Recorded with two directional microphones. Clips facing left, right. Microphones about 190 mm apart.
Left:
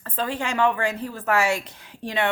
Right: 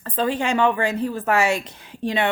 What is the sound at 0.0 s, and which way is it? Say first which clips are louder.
Speech: right 5 dB; 20° right (ahead or behind).